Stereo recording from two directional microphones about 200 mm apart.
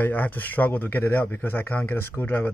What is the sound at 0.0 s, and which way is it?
Speech, 10° left (ahead or behind).